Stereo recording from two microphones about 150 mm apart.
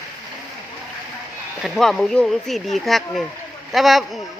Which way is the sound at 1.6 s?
Centre (ahead or behind).